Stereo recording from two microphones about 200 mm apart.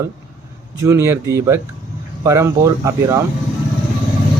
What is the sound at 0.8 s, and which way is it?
Speech, 15° right (ahead or behind).